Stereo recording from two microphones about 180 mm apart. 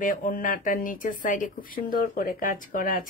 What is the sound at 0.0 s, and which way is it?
Speech, 45° left (ahead or behind).